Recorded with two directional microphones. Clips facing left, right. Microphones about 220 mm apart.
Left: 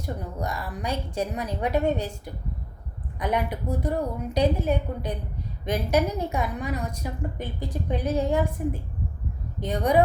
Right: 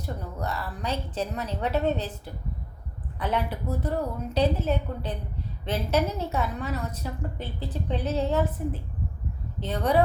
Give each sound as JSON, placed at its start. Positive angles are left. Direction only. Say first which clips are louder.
{"t": 0.0, "sound": "a woman's voice", "louder": "left 2 dB", "side_deg": 10}